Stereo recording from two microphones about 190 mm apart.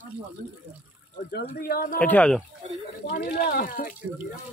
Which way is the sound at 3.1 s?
55° left (ahead or behind).